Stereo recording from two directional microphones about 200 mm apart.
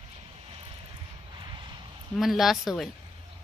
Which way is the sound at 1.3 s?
25° right (ahead or behind).